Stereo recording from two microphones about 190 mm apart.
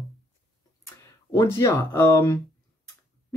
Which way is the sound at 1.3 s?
15° left (ahead or behind).